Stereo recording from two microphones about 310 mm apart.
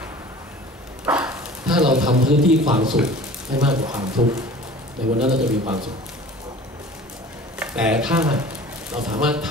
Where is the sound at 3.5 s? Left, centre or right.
Centre.